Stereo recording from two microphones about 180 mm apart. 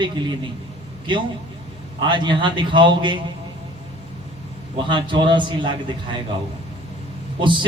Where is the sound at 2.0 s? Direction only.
25° right (ahead or behind).